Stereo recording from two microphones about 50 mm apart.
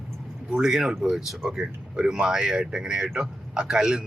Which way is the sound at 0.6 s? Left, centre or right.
Centre.